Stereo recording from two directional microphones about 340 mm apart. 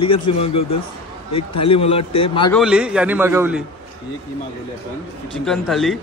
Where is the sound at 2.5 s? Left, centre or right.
Centre.